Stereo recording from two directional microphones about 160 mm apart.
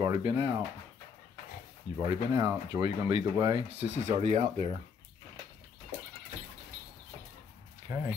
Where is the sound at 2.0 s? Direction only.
25° right (ahead or behind).